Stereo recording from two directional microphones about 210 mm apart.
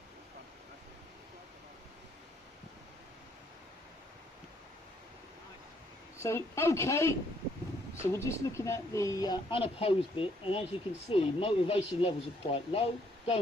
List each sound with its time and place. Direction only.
6.1 s speech: 15° left (ahead or behind)